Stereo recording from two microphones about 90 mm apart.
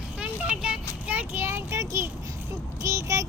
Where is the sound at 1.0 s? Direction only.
20° right (ahead or behind); by 3.2 s 40° right (ahead or behind).